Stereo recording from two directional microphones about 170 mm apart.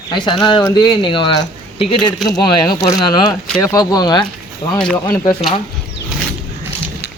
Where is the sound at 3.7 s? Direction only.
25° left (ahead or behind).